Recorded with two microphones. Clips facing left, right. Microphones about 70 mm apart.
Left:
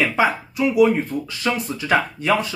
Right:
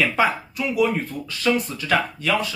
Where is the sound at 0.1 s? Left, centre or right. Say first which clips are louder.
Left 1 dB; centre.